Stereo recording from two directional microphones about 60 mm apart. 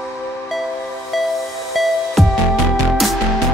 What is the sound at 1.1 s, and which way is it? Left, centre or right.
Music, centre.